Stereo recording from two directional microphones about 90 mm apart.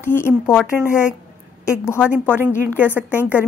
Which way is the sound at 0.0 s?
25° left (ahead or behind).